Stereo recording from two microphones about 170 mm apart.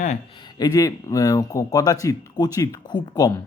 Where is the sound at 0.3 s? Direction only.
25° left (ahead or behind).